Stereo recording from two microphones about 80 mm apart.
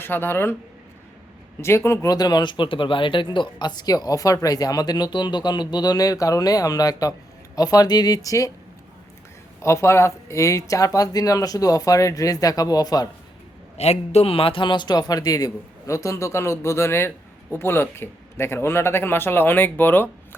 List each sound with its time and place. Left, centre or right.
0.0 s speech: left
1.6 s speech: left
2.0 s speech: left
9.6 s speech: left
14.5 s speech: left